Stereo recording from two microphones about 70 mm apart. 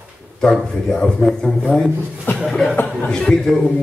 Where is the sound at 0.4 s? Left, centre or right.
Centre.